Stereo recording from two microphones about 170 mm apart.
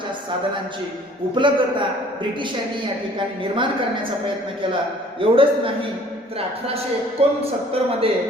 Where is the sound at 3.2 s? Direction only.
30° right (ahead or behind).